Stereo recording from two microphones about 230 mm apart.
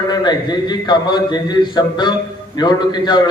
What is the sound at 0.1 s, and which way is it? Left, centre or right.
A man's voice, centre.